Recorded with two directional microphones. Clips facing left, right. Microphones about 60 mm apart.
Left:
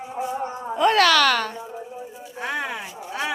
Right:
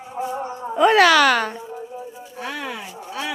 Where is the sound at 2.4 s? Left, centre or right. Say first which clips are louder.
Left 2 dB; left.